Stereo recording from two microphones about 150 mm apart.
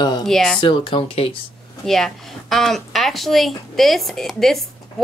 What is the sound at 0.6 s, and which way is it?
Speech, 35° left (ahead or behind).